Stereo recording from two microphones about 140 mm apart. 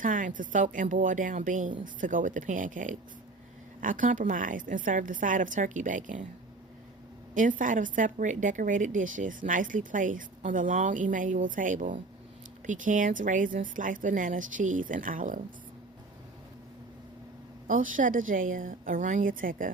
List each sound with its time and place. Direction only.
0.0 s a woman's voice: 70° right (ahead or behind)
7.3 s a woman's voice: 70° right (ahead or behind)
17.7 s a woman's voice: 70° right (ahead or behind)